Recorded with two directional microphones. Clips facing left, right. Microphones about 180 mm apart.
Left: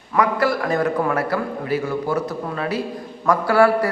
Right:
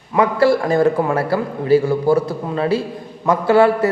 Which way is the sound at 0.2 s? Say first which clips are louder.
Right 5 dB; 30° right (ahead or behind).